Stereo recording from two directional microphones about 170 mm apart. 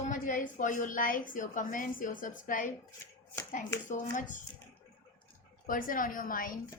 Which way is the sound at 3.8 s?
50° left (ahead or behind).